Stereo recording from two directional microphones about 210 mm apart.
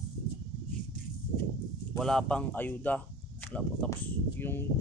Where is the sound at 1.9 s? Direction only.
Centre (ahead or behind).